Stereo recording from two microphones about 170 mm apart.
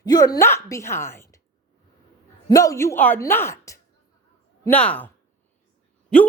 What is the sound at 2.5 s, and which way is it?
Speech, 20° left (ahead or behind).